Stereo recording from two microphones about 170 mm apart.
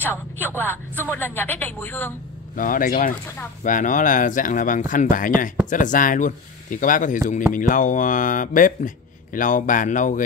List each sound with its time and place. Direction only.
0.0 s a man's voice: 10° left (ahead or behind)
2.5 s speech: 55° left (ahead or behind)